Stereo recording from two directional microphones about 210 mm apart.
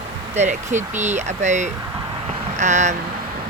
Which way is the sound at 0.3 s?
35° right (ahead or behind).